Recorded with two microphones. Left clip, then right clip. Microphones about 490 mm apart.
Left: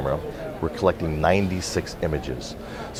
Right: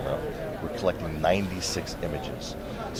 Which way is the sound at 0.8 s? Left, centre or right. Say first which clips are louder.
Left 5 dB; left.